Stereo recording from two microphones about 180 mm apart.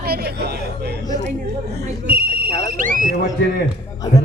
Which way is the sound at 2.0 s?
55° right (ahead or behind).